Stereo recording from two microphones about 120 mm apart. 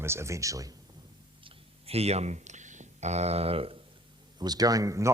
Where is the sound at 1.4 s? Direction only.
55° right (ahead or behind).